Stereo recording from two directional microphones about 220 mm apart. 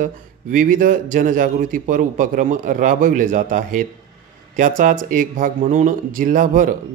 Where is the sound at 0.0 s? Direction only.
35° right (ahead or behind).